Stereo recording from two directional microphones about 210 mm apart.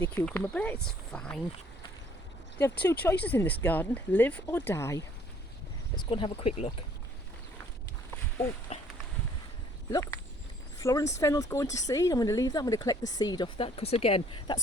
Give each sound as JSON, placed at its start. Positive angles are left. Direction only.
{"t": 0.0, "sound": "speech", "side_deg": 10}
{"t": 2.6, "sound": "speech", "side_deg": 10}
{"t": 8.7, "sound": "a sound", "side_deg": 30}
{"t": 9.9, "sound": "speech", "side_deg": 15}